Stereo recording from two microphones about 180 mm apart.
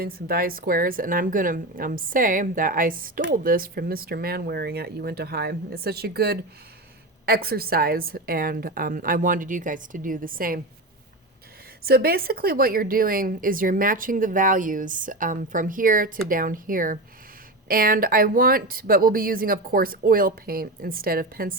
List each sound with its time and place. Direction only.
0.0 s a woman's voice: 55° right (ahead or behind)
11.8 s a woman's voice: 55° right (ahead or behind)